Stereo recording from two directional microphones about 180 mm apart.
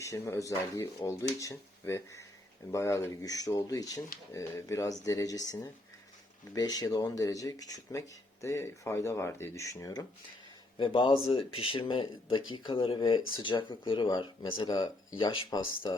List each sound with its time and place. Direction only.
0.0 s speech: 15° left (ahead or behind)